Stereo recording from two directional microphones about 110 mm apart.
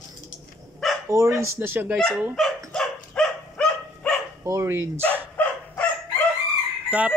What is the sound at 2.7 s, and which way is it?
Dog, 10° left (ahead or behind).